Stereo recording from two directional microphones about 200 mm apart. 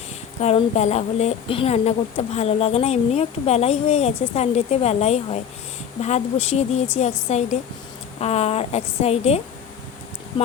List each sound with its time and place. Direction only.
0.4 s speech: 35° left (ahead or behind)